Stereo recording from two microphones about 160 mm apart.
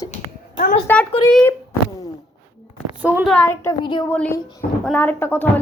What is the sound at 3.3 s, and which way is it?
Speech, 10° left (ahead or behind).